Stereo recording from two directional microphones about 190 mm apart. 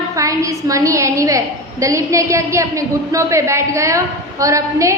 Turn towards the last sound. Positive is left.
turn(degrees=-15)  # may be behind; listen again after turning